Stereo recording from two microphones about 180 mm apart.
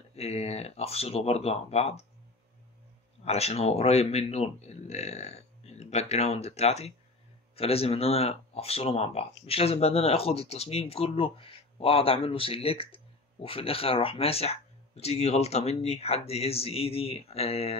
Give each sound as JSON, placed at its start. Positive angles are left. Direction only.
{"t": 0.1, "sound": "speech", "side_deg": 35}
{"t": 3.3, "sound": "speech", "side_deg": 35}